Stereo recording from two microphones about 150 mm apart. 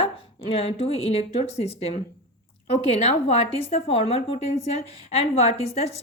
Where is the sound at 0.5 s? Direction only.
40° left (ahead or behind).